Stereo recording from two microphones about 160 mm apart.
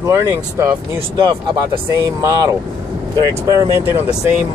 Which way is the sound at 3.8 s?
10° right (ahead or behind).